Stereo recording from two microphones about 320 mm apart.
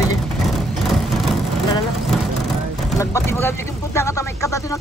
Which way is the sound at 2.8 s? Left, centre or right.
Centre.